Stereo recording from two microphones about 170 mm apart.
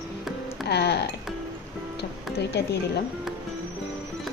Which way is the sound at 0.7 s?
75° left (ahead or behind).